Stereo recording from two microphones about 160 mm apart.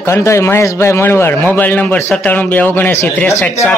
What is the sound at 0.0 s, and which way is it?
A man's voice, 20° left (ahead or behind).